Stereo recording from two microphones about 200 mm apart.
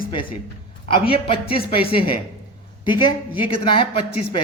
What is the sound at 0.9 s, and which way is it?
Speech, 25° left (ahead or behind).